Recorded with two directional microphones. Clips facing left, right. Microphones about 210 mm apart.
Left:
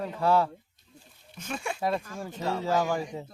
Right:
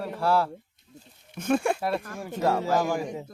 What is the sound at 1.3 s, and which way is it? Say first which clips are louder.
Speech: right 11 dB; 55° right (ahead or behind).